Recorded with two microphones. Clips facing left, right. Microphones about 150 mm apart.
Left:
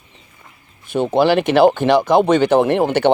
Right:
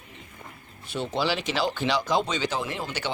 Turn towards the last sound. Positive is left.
turn(degrees=60)  # may be behind; listen again after turning